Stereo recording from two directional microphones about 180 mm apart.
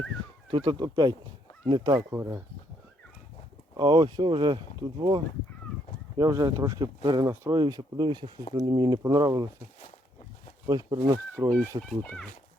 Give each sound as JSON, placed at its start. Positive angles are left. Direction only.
{"t": 0.5, "sound": "speech", "side_deg": -30}
{"t": 3.8, "sound": "speech", "side_deg": -25}
{"t": 10.7, "sound": "speech", "side_deg": -20}
{"t": 11.8, "sound": "speech", "side_deg": 5}